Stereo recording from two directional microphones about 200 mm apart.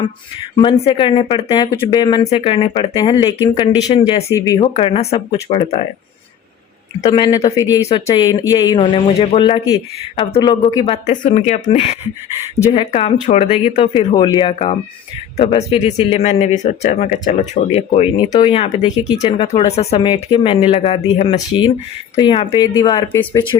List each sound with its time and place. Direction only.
0.6 s a man's voice: 25° left (ahead or behind)
4.7 s a man's voice: 30° left (ahead or behind)
7.0 s a man's voice: 25° left (ahead or behind)